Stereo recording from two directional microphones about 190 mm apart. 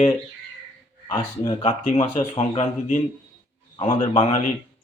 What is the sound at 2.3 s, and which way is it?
Speech, 35° left (ahead or behind).